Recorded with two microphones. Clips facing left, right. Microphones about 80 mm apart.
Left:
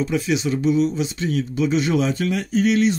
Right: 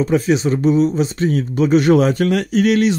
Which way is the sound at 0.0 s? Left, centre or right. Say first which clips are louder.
Right 6 dB; right.